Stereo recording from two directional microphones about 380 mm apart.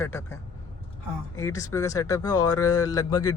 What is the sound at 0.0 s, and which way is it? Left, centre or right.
Speech, centre.